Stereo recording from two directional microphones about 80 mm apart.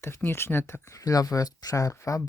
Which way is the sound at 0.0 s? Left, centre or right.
Left.